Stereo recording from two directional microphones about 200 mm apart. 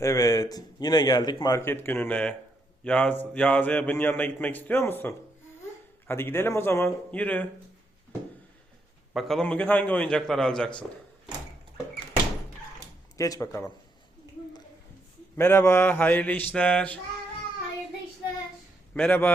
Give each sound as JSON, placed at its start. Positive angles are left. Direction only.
{"t": 0.0, "sound": "a man's voice", "side_deg": 15}
{"t": 9.1, "sound": "a man's voice", "side_deg": 0}
{"t": 13.1, "sound": "a man's voice", "side_deg": 15}
{"t": 15.4, "sound": "a man's voice", "side_deg": 10}
{"t": 18.9, "sound": "a man's voice", "side_deg": 10}